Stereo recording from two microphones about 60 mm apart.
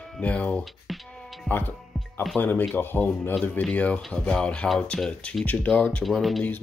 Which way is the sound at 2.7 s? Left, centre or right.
Left.